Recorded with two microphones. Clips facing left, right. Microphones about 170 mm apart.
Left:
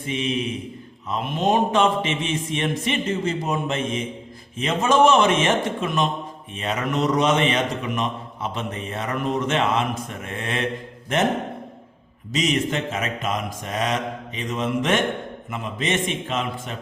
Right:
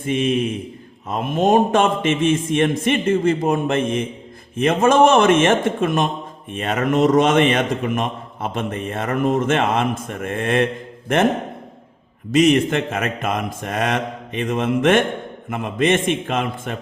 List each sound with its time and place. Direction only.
0.0 s a man's voice: 50° right (ahead or behind)
12.3 s speech: 55° right (ahead or behind)